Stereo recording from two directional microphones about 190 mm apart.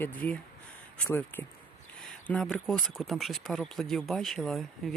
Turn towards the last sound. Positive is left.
turn(degrees=0)  # may be behind; listen again after turning